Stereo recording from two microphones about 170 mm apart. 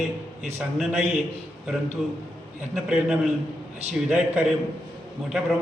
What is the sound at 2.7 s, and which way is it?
A man's voice, centre (ahead or behind).